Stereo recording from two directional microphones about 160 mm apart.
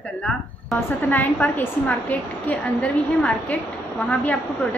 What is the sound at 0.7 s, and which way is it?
A woman's voice, 10° left (ahead or behind).